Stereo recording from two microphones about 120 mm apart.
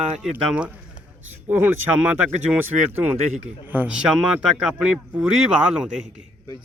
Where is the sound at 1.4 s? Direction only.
15° right (ahead or behind).